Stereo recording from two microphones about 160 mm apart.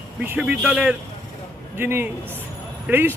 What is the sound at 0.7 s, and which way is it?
Speech, 10° right (ahead or behind).